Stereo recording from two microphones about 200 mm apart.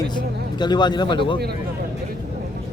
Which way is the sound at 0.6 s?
20° left (ahead or behind).